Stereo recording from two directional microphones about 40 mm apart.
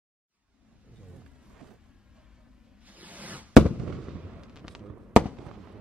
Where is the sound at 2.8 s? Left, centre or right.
Right.